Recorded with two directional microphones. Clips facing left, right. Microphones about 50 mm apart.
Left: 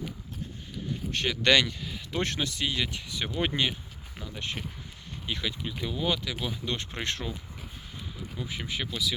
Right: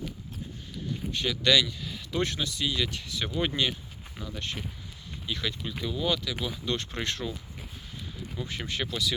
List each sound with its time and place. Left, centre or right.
1.4 s speech: left
1.8 s a sound: left
2.2 s speech: left
2.8 s speech: left
5.4 s speech: centre
7.0 s speech: left
8.4 s speech: centre